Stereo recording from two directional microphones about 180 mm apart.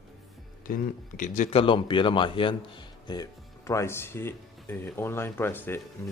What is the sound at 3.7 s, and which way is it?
Speech, 15° left (ahead or behind).